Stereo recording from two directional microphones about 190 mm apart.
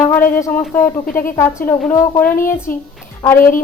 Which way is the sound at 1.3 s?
10° left (ahead or behind).